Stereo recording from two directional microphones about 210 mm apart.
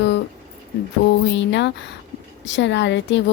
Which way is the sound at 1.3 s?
60° left (ahead or behind).